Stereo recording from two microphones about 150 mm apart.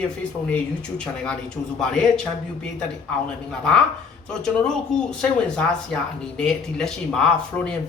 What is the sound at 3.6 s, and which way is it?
Speech, 5° left (ahead or behind).